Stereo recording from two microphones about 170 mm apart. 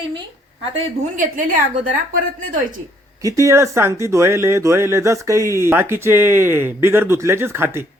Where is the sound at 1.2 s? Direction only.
50° right (ahead or behind).